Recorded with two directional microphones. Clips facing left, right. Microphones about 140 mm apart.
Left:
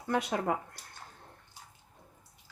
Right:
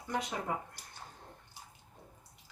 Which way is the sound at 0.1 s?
70° left (ahead or behind).